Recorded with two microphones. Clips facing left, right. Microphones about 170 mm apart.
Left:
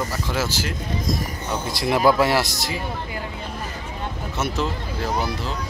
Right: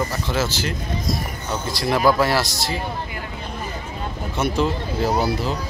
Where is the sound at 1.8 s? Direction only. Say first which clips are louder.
Even; 25° left (ahead or behind).